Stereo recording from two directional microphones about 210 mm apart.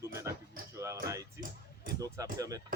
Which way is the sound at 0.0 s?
15° right (ahead or behind).